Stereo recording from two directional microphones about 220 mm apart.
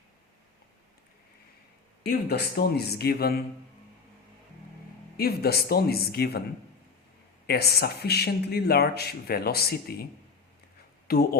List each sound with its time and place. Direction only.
2.0 s speech: 45° left (ahead or behind)
5.1 s speech: 45° left (ahead or behind)
7.4 s speech: 45° left (ahead or behind)
11.1 s speech: 45° left (ahead or behind)